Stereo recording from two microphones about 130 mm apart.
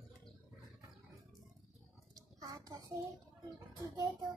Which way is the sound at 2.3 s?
25° right (ahead or behind).